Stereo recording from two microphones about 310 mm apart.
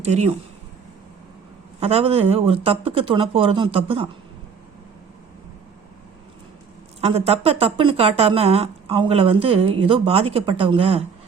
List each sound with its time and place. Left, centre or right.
0.0 s speech: right
1.8 s speech: centre
7.0 s speech: centre